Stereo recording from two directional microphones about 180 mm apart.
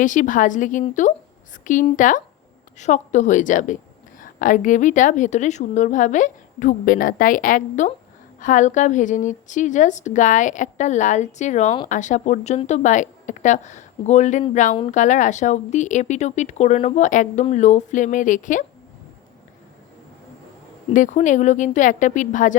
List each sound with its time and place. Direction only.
0.0 s a woman's voice: 45° left (ahead or behind)
20.9 s a woman's voice: 45° left (ahead or behind)